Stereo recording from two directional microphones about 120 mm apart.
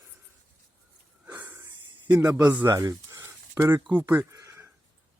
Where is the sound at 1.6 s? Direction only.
30° right (ahead or behind).